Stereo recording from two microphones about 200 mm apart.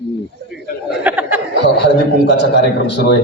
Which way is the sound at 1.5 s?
60° left (ahead or behind).